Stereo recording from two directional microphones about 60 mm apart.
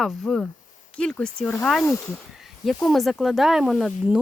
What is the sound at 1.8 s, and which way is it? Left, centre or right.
Speech, left.